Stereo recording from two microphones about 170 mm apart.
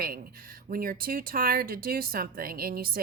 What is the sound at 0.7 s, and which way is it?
Speech, 60° right (ahead or behind).